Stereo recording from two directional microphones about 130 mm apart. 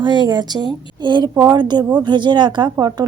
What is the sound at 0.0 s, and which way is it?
A woman's voice, 35° right (ahead or behind).